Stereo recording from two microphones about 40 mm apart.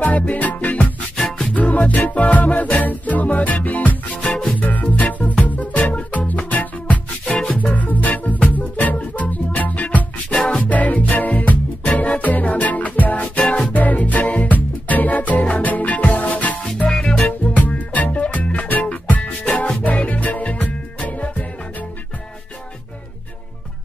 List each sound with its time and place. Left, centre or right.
0.0 s music: left
1.1 s music: left
1.5 s music: left
4.2 s music: left
4.6 s music: left
13.4 s music: left
13.7 s music: left
16.9 s music: centre
17.2 s music: left